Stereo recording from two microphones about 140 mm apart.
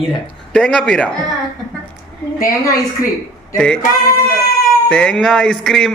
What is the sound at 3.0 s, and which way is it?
Speech, 80° left.